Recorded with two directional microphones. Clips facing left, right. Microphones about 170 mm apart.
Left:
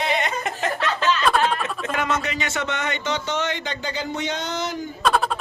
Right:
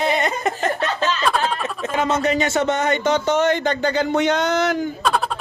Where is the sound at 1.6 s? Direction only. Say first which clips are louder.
Right 3 dB; 25° right (ahead or behind).